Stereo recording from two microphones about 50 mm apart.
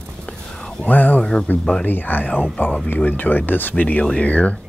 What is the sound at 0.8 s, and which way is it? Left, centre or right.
Speech, left.